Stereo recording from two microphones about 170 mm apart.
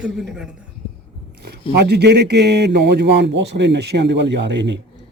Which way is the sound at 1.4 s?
75° right (ahead or behind).